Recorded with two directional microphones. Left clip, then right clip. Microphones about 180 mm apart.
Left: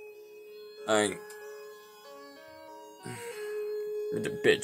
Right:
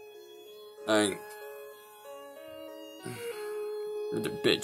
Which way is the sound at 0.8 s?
5° right (ahead or behind).